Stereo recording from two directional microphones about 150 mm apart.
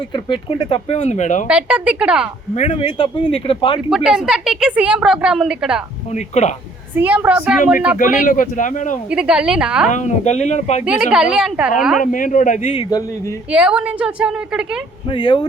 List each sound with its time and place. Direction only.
0.1 s speech: 35° left (ahead or behind); by 1.5 s 55° left (ahead or behind)
1.5 s a woman's voice: 10° right (ahead or behind)
2.6 s speech: 40° left (ahead or behind)
3.8 s a woman's voice: 5° right (ahead or behind)
6.1 s speech: 50° left (ahead or behind)
6.9 s a woman's voice: 10° right (ahead or behind)
8.2 s speech: 60° left (ahead or behind)
9.0 s a woman's voice: 5° right (ahead or behind)
9.9 s speech: 50° left (ahead or behind)
10.8 s a woman's voice: 5° right (ahead or behind)
12.1 s speech: 60° left (ahead or behind)
12.7 s speech: 25° left (ahead or behind)
13.5 s a woman's voice: 5° right (ahead or behind)
15.1 s speech: 30° left (ahead or behind)